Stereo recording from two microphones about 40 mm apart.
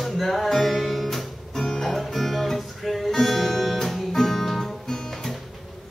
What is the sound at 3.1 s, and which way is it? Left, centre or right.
Guitar, centre.